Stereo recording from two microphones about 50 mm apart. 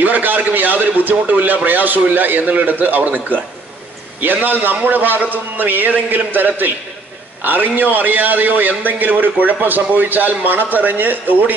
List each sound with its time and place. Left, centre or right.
0.0 s a man's voice: right